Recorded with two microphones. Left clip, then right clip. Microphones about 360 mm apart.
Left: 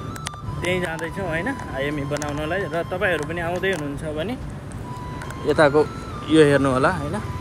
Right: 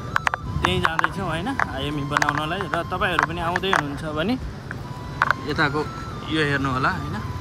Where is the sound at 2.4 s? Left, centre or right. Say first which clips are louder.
Left 1 dB; centre.